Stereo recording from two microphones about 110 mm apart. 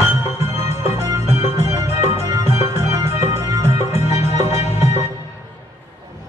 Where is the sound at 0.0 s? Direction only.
25° right (ahead or behind).